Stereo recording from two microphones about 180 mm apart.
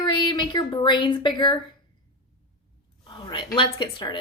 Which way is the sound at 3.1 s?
25° left (ahead or behind).